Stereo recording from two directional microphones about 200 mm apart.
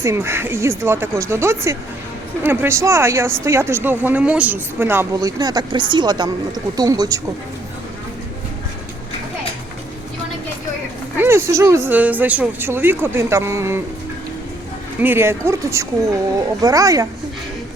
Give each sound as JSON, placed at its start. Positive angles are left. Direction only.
{"t": 0.0, "sound": "speech", "side_deg": -15}
{"t": 11.2, "sound": "speech", "side_deg": -10}
{"t": 15.0, "sound": "speech", "side_deg": -10}